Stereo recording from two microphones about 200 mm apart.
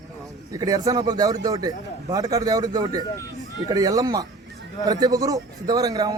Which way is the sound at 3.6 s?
20° right (ahead or behind).